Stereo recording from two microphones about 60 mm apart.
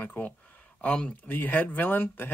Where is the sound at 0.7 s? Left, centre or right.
Centre.